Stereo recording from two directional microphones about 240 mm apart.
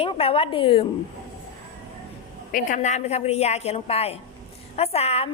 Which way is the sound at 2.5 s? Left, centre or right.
Left.